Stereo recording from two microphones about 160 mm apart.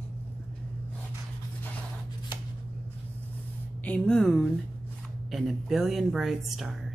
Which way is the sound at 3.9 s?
5° left (ahead or behind).